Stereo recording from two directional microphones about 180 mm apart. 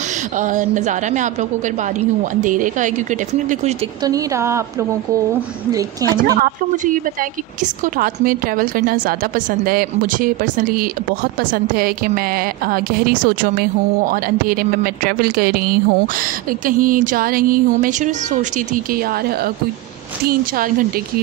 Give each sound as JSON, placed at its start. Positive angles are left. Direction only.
{"t": 0.4, "sound": "a woman's voice", "side_deg": -45}
{"t": 4.0, "sound": "a woman's voice", "side_deg": -20}
{"t": 6.4, "sound": "a woman's voice", "side_deg": -50}